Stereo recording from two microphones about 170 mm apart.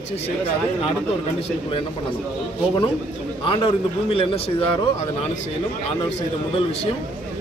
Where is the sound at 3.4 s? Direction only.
30° left (ahead or behind).